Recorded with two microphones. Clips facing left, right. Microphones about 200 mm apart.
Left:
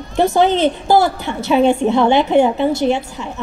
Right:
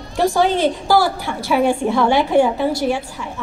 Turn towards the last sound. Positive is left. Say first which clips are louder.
# left 3 dB
turn(degrees=25)  # may be behind; listen again after turning